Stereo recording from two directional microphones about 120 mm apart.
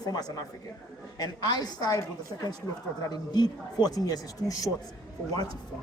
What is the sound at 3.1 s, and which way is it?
Speech, 35° left (ahead or behind).